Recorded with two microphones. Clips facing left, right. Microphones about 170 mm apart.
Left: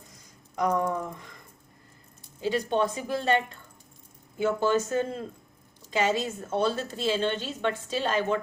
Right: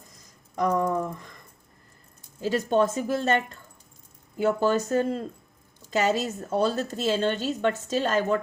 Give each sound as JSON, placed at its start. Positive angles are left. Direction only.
{"t": 0.5, "sound": "speech", "side_deg": -40}
{"t": 2.4, "sound": "a woman's voice", "side_deg": -45}